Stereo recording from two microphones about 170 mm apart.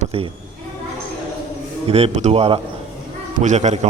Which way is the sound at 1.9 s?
35° right (ahead or behind).